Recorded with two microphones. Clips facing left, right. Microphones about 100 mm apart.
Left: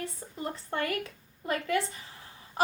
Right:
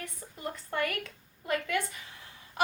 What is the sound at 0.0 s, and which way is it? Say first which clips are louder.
A woman's voice: left 3 dB; 30° left (ahead or behind).